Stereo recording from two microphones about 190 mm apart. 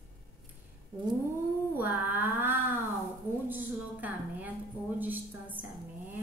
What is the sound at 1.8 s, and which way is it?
Speech, 10° right (ahead or behind).